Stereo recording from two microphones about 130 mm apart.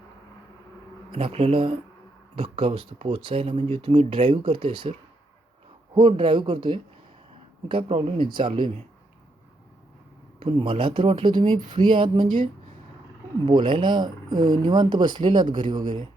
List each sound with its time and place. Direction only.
1.1 s speech: 50° right (ahead or behind)
10.4 s speech: 40° right (ahead or behind)